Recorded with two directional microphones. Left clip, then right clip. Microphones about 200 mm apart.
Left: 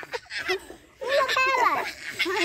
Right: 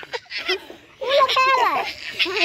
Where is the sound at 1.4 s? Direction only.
45° right (ahead or behind).